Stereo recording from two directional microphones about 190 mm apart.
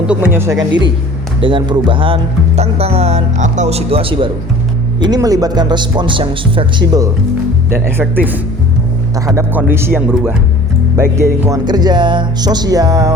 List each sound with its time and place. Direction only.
0.1 s speech: 10° right (ahead or behind)
7.7 s speech: 10° right (ahead or behind)